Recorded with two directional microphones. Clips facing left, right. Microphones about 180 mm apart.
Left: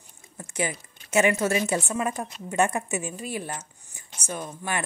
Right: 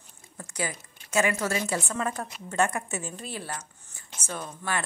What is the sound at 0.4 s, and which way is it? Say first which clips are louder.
A woman's voice: left 4 dB; 20° left (ahead or behind).